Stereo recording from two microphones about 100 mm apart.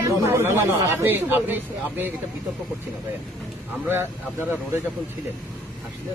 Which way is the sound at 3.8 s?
20° right (ahead or behind).